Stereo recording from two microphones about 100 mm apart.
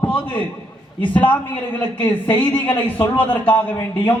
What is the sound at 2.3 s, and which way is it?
A man's voice, 20° left (ahead or behind).